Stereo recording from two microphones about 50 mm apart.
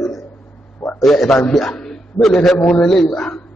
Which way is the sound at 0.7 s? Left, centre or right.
Left.